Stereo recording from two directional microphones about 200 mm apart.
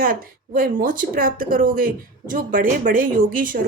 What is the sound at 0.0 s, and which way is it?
Speech, 45° right (ahead or behind).